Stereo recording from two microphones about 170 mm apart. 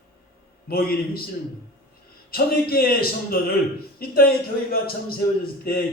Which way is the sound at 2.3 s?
65° left (ahead or behind).